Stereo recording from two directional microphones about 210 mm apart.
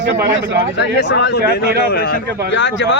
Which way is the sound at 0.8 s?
55° left (ahead or behind).